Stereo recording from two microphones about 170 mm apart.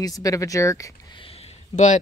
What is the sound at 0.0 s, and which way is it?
Speech, 20° left (ahead or behind).